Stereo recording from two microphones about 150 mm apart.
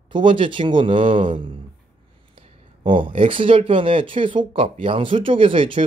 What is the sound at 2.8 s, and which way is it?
Speech, 35° right (ahead or behind).